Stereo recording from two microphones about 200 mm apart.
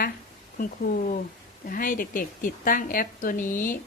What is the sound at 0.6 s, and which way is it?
Speech, 45° left (ahead or behind).